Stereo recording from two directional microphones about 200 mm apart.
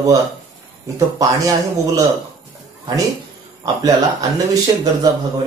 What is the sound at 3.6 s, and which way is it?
Speech, 20° right (ahead or behind).